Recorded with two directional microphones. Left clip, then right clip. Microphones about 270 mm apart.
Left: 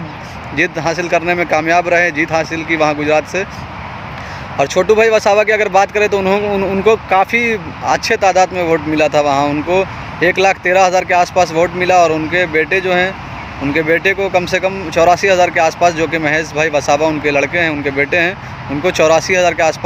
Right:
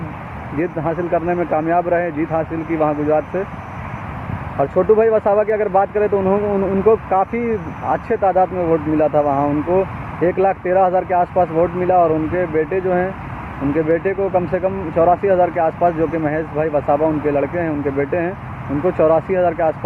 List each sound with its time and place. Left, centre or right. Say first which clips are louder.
0.6 s speech: left 5 dB; centre
4.6 s speech: left 3 dB; centre